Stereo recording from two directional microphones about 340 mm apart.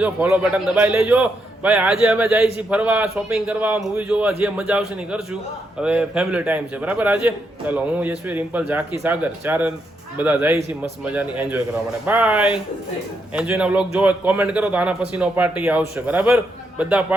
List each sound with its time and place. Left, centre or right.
0.0 s a man's voice: centre